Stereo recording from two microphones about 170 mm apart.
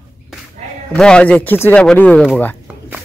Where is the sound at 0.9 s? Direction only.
5° left (ahead or behind).